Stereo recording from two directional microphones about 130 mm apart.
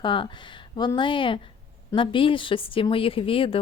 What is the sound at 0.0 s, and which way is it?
A woman's voice, 40° left (ahead or behind).